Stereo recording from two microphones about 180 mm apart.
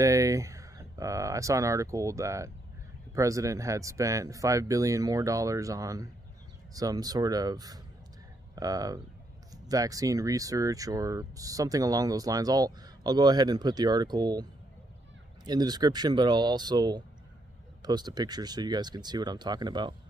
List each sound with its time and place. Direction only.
0.0 s speech: 15° right (ahead or behind)
15.4 s speech: 20° right (ahead or behind)